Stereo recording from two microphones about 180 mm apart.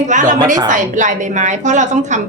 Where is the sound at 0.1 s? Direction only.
45° right (ahead or behind).